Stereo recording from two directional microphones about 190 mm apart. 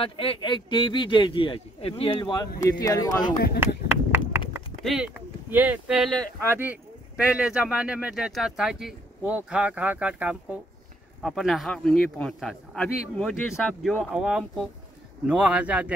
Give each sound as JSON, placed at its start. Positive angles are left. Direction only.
{"t": 0.0, "sound": "speech", "side_deg": 30}
{"t": 3.5, "sound": "run", "side_deg": -10}
{"t": 4.8, "sound": "speech", "side_deg": -5}